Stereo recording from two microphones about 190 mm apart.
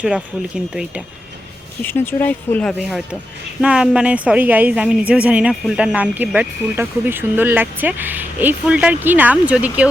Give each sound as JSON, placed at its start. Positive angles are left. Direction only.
{"t": 0.0, "sound": "speech", "side_deg": -5}
{"t": 1.8, "sound": "speech", "side_deg": 10}